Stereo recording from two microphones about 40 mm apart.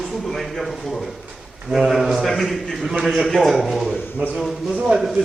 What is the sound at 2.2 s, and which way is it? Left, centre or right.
A man's voice, centre.